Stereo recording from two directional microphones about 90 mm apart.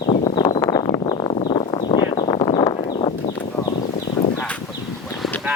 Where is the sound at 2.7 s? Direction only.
90° left.